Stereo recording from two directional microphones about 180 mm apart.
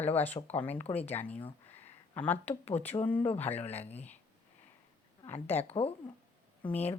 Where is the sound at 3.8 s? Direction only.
35° left (ahead or behind).